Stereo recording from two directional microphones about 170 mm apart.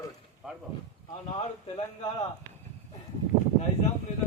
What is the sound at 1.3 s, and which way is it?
Speech, 30° left (ahead or behind).